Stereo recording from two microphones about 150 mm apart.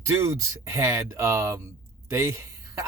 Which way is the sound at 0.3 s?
20° right (ahead or behind).